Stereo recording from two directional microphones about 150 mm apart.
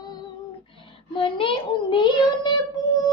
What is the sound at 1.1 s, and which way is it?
Child singing, 35° left (ahead or behind).